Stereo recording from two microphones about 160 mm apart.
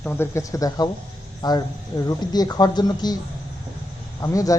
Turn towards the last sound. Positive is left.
turn(degrees=20)  # may be behind; listen again after turning